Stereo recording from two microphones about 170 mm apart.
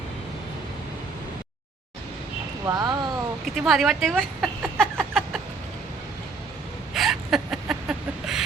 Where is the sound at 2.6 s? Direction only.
20° right (ahead or behind).